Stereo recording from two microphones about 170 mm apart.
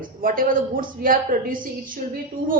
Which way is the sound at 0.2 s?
55° right (ahead or behind).